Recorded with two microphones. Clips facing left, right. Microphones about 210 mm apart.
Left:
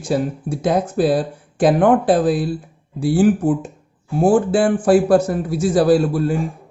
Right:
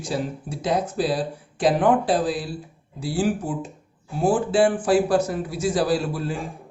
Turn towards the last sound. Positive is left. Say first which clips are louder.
# left 9 dB
turn(degrees=50)  # may be behind; listen again after turning